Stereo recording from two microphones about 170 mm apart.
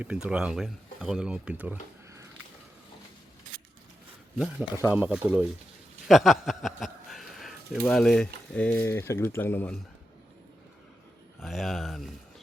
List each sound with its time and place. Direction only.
0.0 s speech: 5° right (ahead or behind)
4.4 s speech: 5° right (ahead or behind); by 9.7 s 10° left (ahead or behind)
11.3 s speech: centre (ahead or behind)